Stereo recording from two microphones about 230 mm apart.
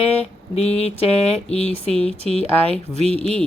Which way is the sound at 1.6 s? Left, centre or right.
Left.